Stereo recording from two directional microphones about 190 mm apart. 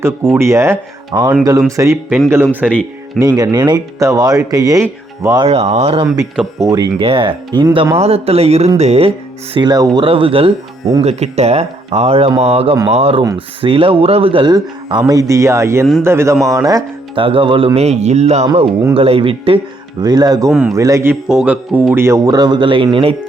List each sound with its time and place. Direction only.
0.0 s speech: 10° right (ahead or behind)
5.5 s speech: 35° right (ahead or behind)
6.6 s speech: 20° right (ahead or behind)
9.6 s speech: 20° right (ahead or behind)
20.5 s a man's voice: 5° right (ahead or behind)
20.7 s speech: 15° right (ahead or behind)